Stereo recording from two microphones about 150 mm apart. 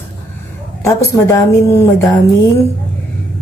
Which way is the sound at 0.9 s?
20° left (ahead or behind).